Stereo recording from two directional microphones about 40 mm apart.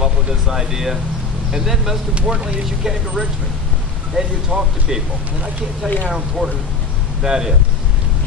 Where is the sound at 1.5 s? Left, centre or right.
Centre.